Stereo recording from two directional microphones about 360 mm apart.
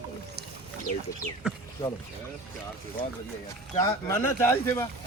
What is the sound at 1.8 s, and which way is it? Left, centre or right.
Speech, centre.